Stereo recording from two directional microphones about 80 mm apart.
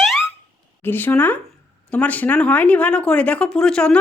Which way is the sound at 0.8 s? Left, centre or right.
Left.